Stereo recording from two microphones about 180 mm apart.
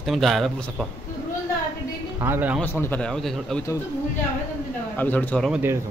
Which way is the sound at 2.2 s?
10° right (ahead or behind).